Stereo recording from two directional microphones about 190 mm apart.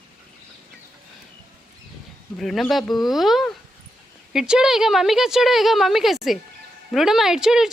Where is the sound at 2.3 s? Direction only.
Centre (ahead or behind).